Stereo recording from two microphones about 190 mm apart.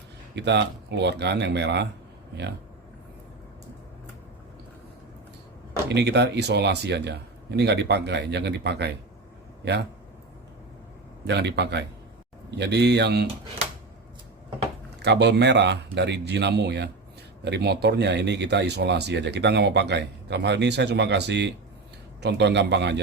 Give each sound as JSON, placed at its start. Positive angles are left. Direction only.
{"t": 0.3, "sound": "speech", "side_deg": -65}
{"t": 5.9, "sound": "speech", "side_deg": -65}
{"t": 11.3, "sound": "speech", "side_deg": -60}
{"t": 14.9, "sound": "speech", "side_deg": -65}